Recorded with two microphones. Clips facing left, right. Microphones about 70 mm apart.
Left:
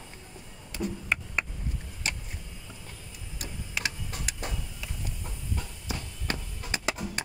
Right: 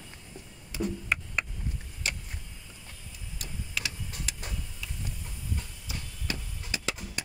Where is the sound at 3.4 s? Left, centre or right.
Left.